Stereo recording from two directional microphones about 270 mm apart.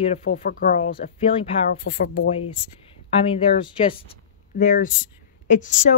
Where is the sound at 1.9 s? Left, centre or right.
Left.